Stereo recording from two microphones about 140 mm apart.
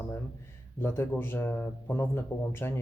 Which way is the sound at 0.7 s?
15° left (ahead or behind).